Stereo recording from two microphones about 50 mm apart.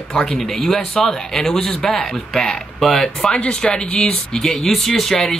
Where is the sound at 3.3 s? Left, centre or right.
Centre.